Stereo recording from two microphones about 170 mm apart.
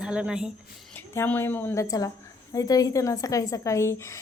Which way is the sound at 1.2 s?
15° left (ahead or behind).